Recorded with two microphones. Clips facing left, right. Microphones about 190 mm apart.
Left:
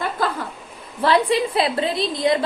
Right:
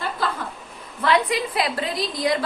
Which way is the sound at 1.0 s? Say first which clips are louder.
Left 3 dB; 30° left (ahead or behind).